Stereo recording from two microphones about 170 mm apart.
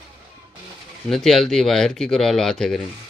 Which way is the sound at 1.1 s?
Centre (ahead or behind).